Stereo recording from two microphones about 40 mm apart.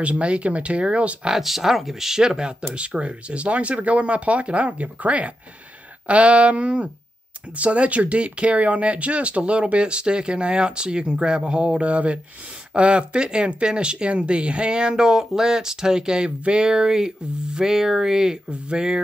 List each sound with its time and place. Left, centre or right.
0.0 s speech: right
1.3 s speech: centre; by 18.9 s right